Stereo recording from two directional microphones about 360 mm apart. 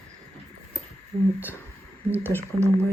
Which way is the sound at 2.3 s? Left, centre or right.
Centre.